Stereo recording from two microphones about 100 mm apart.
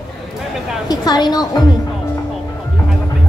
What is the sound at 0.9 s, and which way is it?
Speech, 40° left (ahead or behind).